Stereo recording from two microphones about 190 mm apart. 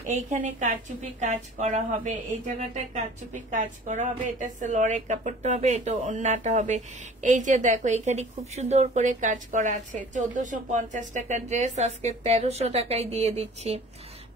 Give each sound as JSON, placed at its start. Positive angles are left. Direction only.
{"t": 0.1, "sound": "a woman's voice", "side_deg": -40}